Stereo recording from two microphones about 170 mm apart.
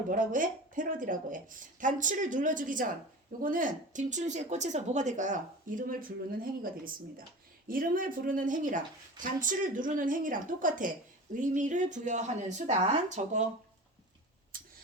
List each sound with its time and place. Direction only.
0.1 s speech: 50° right (ahead or behind)